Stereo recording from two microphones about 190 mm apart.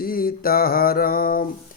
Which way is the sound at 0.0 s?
50° left (ahead or behind).